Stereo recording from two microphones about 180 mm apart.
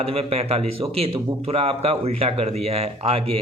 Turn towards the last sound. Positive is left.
turn(degrees=-35)  # may be behind; listen again after turning